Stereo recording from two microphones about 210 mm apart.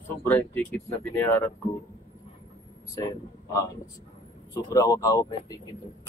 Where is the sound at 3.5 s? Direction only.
15° left (ahead or behind).